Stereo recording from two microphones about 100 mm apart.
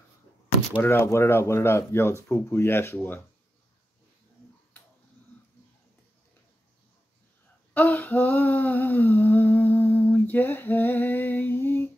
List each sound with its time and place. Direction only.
0.8 s speech: 25° left (ahead or behind)
4.7 s finger snapping: 15° left (ahead or behind)
7.7 s humming: 15° left (ahead or behind)